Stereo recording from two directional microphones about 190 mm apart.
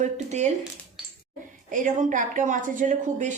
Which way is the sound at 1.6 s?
45° right (ahead or behind).